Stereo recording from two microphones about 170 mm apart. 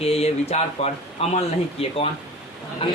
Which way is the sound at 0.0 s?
35° left (ahead or behind).